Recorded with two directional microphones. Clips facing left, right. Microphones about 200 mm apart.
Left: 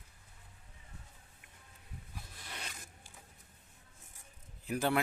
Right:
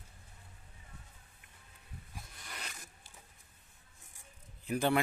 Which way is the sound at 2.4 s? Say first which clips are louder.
Left 1 dB; 30° left (ahead or behind).